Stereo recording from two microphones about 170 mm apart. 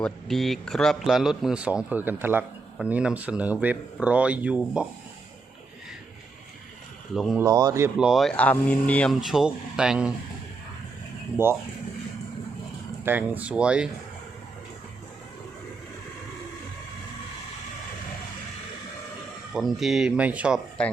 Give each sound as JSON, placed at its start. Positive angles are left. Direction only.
{"t": 0.0, "sound": "speech", "side_deg": 0}
{"t": 7.1, "sound": "speech", "side_deg": 0}
{"t": 7.4, "sound": "speech", "side_deg": -20}
{"t": 7.9, "sound": "speech", "side_deg": -5}
{"t": 13.1, "sound": "speech", "side_deg": -10}
{"t": 19.5, "sound": "speech", "side_deg": 0}
{"t": 20.8, "sound": "speech", "side_deg": 5}